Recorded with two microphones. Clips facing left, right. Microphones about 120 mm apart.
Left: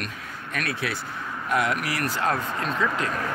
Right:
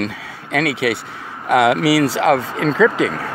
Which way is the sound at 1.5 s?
85° right.